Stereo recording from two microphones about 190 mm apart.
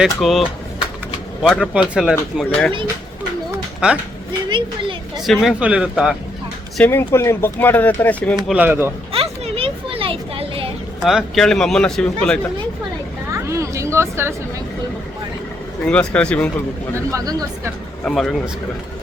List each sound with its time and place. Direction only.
0.0 s a man's voice: centre (ahead or behind)
4.4 s a sound: 25° right (ahead or behind)
5.2 s a man's voice: centre (ahead or behind)
6.7 s speech: 10° left (ahead or behind)
8.4 s speech: 10° right (ahead or behind)
9.1 s a sound: 30° right (ahead or behind)
11.0 s a man's voice: centre (ahead or behind)
13.3 s a sound: 15° right (ahead or behind)
15.9 s speech: 5° left (ahead or behind)
17.1 s speech: 15° right (ahead or behind)
18.0 s a man's voice: centre (ahead or behind)